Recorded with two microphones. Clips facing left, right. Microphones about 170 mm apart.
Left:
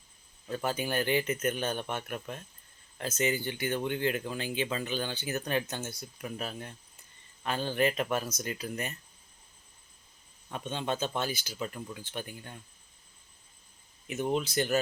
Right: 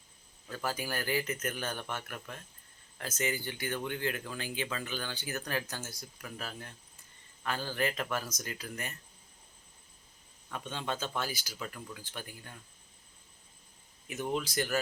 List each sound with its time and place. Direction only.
0.4 s speech: 25° left (ahead or behind)
10.5 s speech: 20° left (ahead or behind)
14.1 s speech: 20° left (ahead or behind)